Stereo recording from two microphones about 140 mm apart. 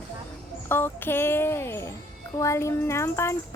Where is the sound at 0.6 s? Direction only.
15° left (ahead or behind).